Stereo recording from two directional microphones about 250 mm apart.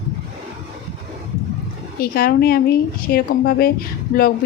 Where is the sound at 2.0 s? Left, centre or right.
Left.